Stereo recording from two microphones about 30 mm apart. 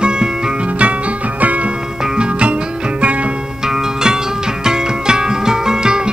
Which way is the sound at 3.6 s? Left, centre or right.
Right.